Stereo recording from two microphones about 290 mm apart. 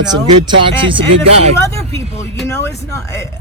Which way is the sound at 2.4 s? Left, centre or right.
Centre.